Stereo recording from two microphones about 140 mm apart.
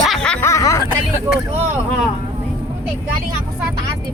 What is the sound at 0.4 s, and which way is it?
Music, 20° left (ahead or behind).